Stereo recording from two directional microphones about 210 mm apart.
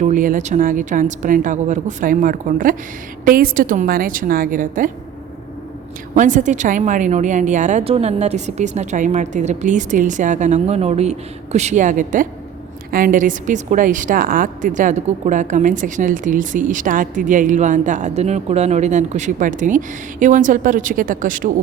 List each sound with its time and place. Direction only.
0.0 s a woman's voice: 40° right (ahead or behind)
6.1 s a woman's voice: 35° right (ahead or behind)